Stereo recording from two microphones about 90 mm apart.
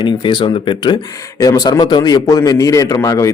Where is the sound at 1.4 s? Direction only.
45° left (ahead or behind).